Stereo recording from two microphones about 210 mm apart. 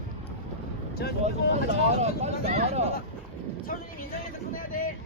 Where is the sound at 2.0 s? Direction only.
30° right (ahead or behind).